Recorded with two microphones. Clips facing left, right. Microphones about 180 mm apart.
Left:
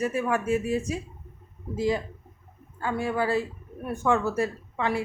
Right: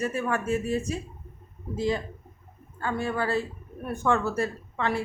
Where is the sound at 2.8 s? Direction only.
10° left (ahead or behind).